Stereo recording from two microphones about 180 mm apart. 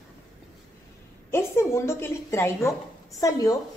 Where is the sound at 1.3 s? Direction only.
15° left (ahead or behind).